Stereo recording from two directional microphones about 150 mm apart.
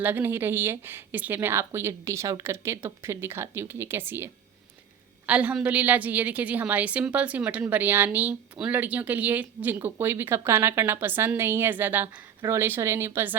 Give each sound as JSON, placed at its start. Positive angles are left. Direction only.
{"t": 0.0, "sound": "a woman's voice", "side_deg": -15}